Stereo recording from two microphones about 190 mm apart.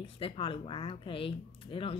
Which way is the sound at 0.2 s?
25° left (ahead or behind).